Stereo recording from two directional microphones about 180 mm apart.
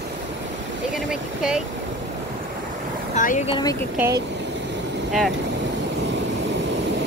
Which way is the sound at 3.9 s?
15° right (ahead or behind).